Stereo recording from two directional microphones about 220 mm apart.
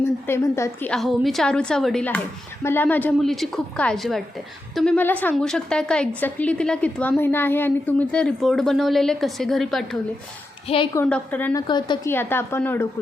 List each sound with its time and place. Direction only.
0.0 s a woman's voice: 10° left (ahead or behind)
11.7 s a woman's voice: 20° left (ahead or behind)